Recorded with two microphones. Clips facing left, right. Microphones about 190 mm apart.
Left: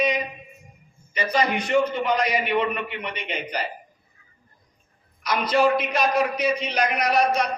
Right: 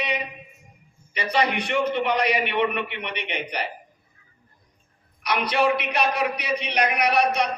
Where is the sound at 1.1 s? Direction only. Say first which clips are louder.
Left 1 dB; 70° right (ahead or behind).